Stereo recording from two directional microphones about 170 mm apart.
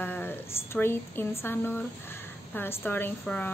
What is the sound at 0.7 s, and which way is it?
A woman's voice, 15° left (ahead or behind).